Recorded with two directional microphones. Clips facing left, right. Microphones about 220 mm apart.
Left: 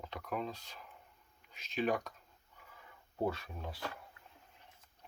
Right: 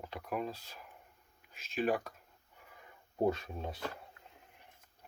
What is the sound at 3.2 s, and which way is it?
Speech, 20° right (ahead or behind).